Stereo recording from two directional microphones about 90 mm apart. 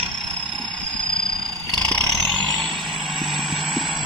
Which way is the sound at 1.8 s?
10° left (ahead or behind).